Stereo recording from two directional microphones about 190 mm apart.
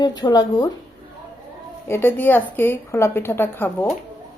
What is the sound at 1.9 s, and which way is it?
Speech, 10° left (ahead or behind).